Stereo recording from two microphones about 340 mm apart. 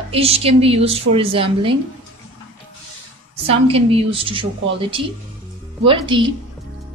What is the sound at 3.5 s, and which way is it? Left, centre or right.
A woman's voice, centre.